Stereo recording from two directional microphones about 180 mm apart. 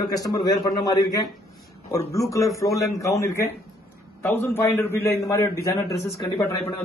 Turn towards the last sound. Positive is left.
turn(degrees=15)  # may be behind; listen again after turning